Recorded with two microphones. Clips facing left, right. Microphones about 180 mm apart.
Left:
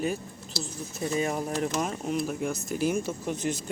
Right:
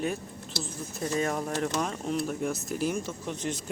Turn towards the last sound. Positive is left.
turn(degrees=10)  # may be behind; listen again after turning